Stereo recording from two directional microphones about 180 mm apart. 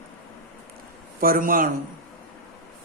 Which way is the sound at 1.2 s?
55° right (ahead or behind).